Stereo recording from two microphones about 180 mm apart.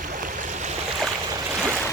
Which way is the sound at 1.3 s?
15° right (ahead or behind).